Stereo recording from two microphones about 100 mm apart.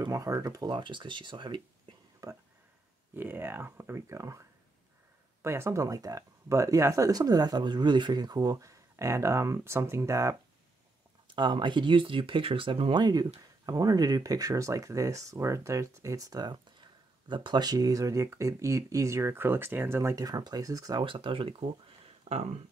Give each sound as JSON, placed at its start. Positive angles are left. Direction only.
{"t": 0.1, "sound": "speech", "side_deg": -30}
{"t": 2.2, "sound": "speech", "side_deg": -35}
{"t": 3.2, "sound": "speech", "side_deg": -20}
{"t": 11.3, "sound": "speech", "side_deg": -50}
{"t": 13.0, "sound": "speech", "side_deg": -45}
{"t": 21.0, "sound": "speech", "side_deg": -60}